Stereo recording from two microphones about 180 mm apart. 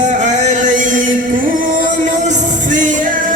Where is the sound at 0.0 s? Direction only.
45° right (ahead or behind).